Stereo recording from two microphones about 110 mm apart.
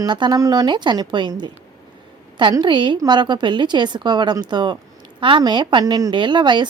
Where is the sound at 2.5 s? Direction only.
45° right (ahead or behind).